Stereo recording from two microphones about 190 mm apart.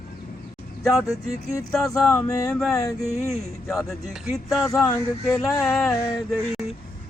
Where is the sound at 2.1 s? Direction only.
15° left (ahead or behind).